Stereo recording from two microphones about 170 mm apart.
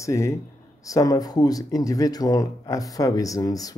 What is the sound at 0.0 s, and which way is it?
Speech, 20° left (ahead or behind).